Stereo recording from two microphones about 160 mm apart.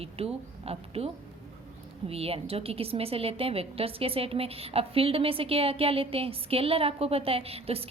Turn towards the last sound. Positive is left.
turn(degrees=-40)  # may be behind; listen again after turning